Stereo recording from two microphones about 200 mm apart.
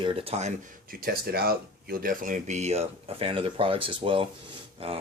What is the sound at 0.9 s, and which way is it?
Speech, 50° right (ahead or behind).